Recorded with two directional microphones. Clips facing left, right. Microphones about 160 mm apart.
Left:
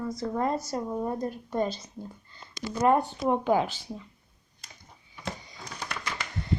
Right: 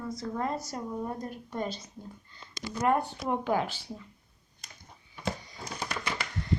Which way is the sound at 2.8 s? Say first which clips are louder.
Left 4 dB; 25° left (ahead or behind).